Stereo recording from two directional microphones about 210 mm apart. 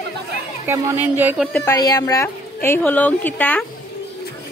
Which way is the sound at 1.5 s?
10° left (ahead or behind).